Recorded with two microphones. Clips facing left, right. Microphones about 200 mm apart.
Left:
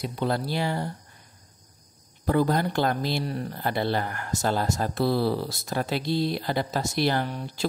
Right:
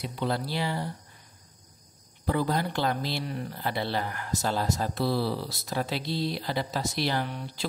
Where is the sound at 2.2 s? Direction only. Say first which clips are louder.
Left 4 dB; 50° left (ahead or behind).